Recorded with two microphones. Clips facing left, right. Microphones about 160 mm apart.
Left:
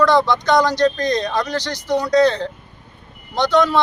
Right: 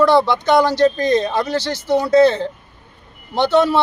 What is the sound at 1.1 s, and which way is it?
Speech, 20° right (ahead or behind).